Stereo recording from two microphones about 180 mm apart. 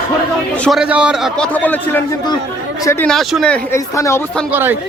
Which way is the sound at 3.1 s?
Centre (ahead or behind).